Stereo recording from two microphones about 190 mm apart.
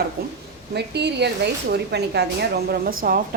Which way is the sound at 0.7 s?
60° right (ahead or behind).